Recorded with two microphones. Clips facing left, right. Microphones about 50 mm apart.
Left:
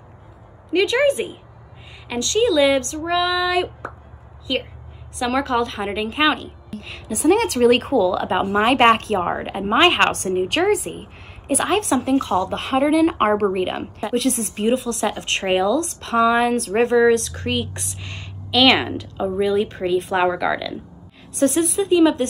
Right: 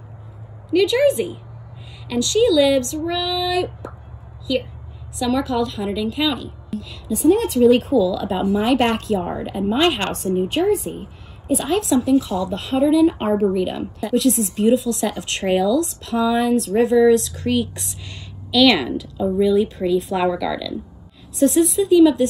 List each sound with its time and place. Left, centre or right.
0.7 s speech: left
5.2 s speech: left
6.8 s a woman's voice: left
8.1 s a woman's voice: left
10.9 s speech: left
11.4 s a woman's voice: left
13.5 s speech: left
17.5 s a woman's voice: left
21.4 s speech: left